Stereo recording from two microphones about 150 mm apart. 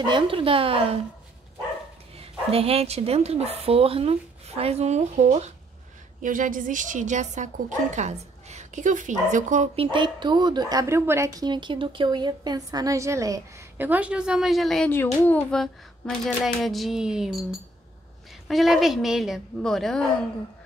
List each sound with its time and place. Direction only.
0.0 s speech: 35° right (ahead or behind)
2.1 s a woman's voice: 40° right (ahead or behind)
6.2 s a woman's voice: 65° right (ahead or behind)
9.8 s a woman's voice: 35° right (ahead or behind)
13.8 s speech: 10° right (ahead or behind)
14.9 s speech: 15° left (ahead or behind)